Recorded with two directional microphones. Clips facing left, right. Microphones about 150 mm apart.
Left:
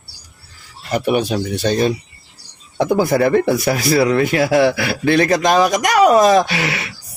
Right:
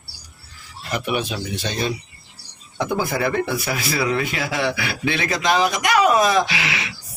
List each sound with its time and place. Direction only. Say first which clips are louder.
0.9 s speech: left 7 dB; 40° left (ahead or behind)